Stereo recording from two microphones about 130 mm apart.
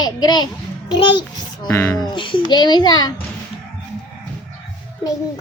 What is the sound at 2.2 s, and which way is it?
Speech, 40° left (ahead or behind).